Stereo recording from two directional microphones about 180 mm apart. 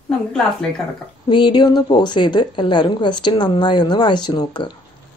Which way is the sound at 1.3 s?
25° left (ahead or behind).